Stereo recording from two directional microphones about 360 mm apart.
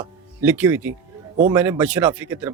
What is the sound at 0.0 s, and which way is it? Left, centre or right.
A man's voice, centre.